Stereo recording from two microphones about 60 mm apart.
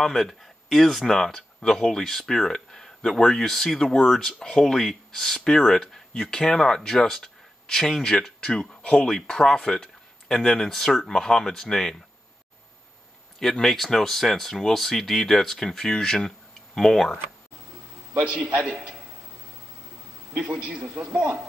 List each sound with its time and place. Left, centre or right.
0.0 s speech: centre
13.4 s speech: centre
18.5 s a man's voice: centre
20.5 s a man's voice: centre